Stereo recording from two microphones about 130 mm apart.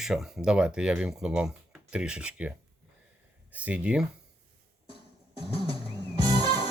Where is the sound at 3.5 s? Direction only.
10° right (ahead or behind).